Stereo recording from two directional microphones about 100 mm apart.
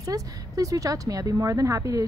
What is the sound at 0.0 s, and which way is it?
Speech, 35° right (ahead or behind).